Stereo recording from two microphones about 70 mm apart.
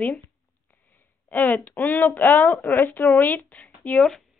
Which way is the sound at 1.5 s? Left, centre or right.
Left.